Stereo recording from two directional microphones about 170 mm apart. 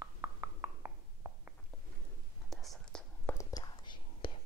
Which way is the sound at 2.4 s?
Centre (ahead or behind).